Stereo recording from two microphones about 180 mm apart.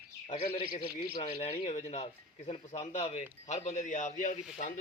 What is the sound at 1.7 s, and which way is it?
Speech, 40° left (ahead or behind).